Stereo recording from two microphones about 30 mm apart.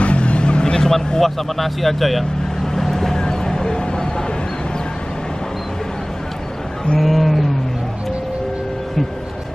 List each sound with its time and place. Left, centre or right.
0.0 s vehicle: left
0.7 s speech: centre
2.6 s vehicle: centre
7.0 s speech: centre